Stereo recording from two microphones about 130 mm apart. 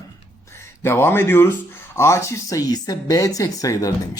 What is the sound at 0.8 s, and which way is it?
Speech, 20° left (ahead or behind).